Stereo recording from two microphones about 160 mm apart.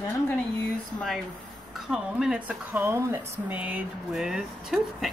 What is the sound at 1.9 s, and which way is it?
A woman's voice, 5° right (ahead or behind).